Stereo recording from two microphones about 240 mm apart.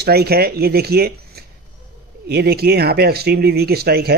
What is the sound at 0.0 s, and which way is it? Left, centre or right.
A man's voice, right.